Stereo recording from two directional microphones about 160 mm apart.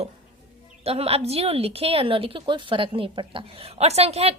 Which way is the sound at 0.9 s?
40° right (ahead or behind).